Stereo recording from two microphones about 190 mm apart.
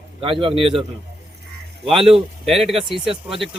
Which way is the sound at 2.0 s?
Centre (ahead or behind).